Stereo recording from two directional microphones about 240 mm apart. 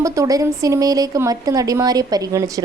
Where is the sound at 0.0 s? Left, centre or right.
Centre.